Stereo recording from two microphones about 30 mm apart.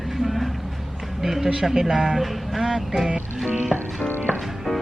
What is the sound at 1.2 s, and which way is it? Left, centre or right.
Speech, centre.